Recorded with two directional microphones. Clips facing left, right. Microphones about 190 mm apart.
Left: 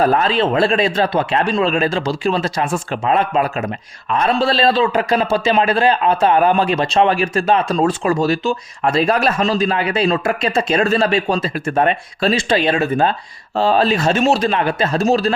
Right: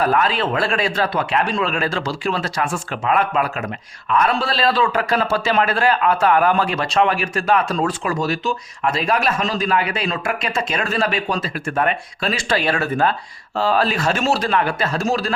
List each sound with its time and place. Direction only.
0.0 s speech: 30° left (ahead or behind)